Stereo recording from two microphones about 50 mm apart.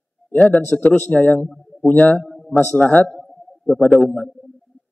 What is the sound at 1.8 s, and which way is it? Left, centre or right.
Speech, left.